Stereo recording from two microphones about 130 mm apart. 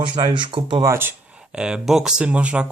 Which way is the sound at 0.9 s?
15° right (ahead or behind).